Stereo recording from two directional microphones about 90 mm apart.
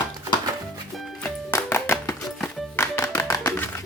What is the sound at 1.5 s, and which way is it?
Music, 30° left (ahead or behind).